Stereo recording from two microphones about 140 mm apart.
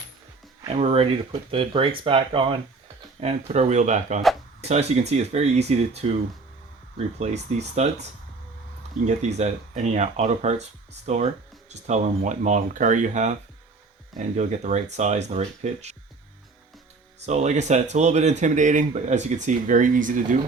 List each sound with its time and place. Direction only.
0.7 s speech: 45° right (ahead or behind)
3.2 s speech: 50° right (ahead or behind)
7.2 s speech: 55° right (ahead or behind)
9.0 s speech: 55° right (ahead or behind)
17.2 s speech: 55° right (ahead or behind); by 20.4 s 70° right (ahead or behind)